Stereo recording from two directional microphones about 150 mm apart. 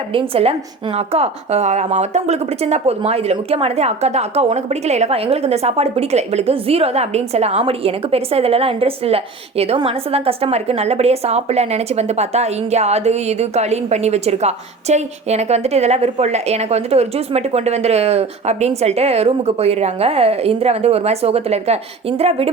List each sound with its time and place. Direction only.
0.1 s a woman's voice: 40° right (ahead or behind)